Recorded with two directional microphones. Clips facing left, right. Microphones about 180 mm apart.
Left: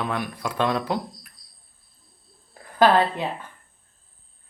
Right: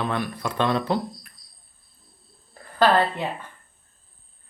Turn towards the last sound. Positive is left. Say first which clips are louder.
# left 1 dB
turn(degrees=15)  # may be behind; listen again after turning